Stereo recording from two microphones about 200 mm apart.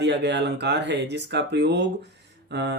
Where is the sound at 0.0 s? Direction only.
60° right (ahead or behind).